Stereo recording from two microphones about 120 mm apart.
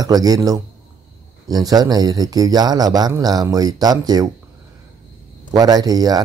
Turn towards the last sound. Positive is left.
turn(degrees=-30)  # may be behind; listen again after turning